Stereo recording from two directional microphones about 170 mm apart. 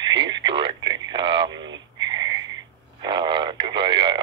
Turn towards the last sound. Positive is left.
turn(degrees=-25)  # may be behind; listen again after turning